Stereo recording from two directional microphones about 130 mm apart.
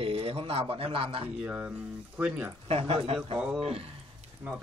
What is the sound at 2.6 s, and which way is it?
A man's voice, 50° right (ahead or behind).